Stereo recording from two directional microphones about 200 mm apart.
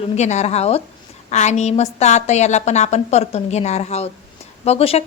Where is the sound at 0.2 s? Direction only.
35° left (ahead or behind).